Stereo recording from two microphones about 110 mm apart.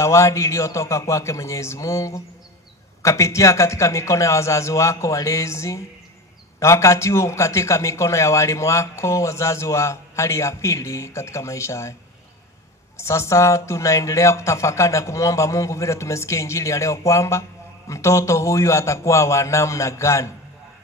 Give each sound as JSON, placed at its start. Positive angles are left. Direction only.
{"t": 0.0, "sound": "speech", "side_deg": 25}
{"t": 12.9, "sound": "speech", "side_deg": 25}